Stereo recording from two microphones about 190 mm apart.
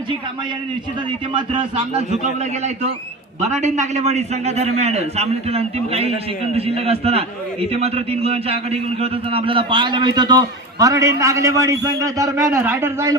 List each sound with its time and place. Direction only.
1.3 s a man's voice: 25° right (ahead or behind)
3.5 s a man's voice: 40° right (ahead or behind); by 13.1 s 15° right (ahead or behind)